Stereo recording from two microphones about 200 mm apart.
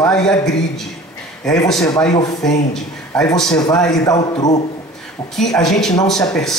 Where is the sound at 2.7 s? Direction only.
5° left (ahead or behind).